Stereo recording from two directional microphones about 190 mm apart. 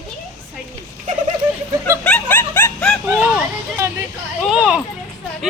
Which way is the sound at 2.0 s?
10° left (ahead or behind).